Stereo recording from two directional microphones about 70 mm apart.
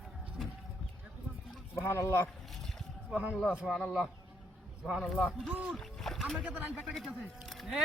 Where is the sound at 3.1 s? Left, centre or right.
Centre.